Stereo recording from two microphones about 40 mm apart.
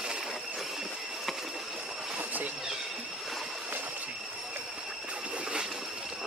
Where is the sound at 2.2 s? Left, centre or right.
Right.